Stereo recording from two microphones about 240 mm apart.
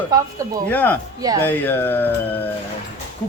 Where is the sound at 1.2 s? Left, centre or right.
Centre.